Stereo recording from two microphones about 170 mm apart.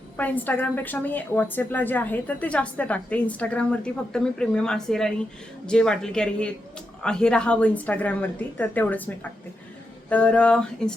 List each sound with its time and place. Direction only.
0.2 s a woman's voice: 10° left (ahead or behind)